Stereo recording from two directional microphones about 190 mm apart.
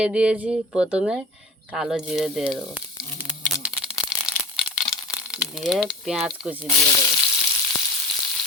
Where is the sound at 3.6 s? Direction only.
Centre (ahead or behind).